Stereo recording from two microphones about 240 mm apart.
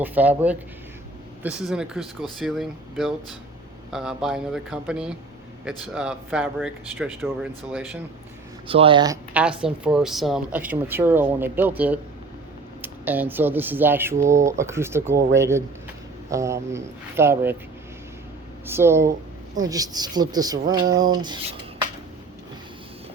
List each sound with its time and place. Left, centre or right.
0.0 s speech: centre
8.6 s speech: right
9.3 s speech: centre
18.6 s speech: centre